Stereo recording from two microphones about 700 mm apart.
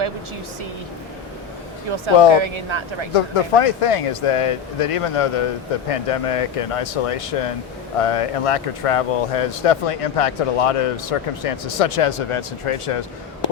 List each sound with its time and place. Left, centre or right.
1.9 s speech: right
3.2 s speech: left